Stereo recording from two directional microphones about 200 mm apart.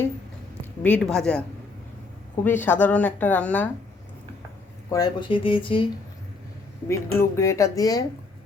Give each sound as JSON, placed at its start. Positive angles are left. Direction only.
{"t": 0.6, "sound": "a woman's voice", "side_deg": 5}
{"t": 4.9, "sound": "speech", "side_deg": 20}
{"t": 6.8, "sound": "speech", "side_deg": 15}